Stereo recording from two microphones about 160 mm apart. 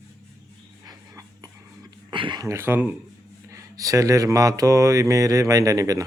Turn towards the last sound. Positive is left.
turn(degrees=-20)  # may be behind; listen again after turning